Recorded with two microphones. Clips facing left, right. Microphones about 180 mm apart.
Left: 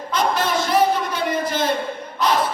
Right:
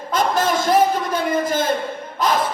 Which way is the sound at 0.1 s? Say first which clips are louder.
Right 2 dB; 45° right (ahead or behind).